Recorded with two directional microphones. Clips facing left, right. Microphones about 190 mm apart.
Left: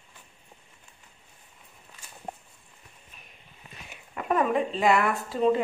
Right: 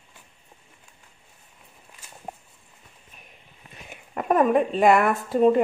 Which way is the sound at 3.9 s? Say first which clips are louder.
Right 5 dB; 50° right (ahead or behind).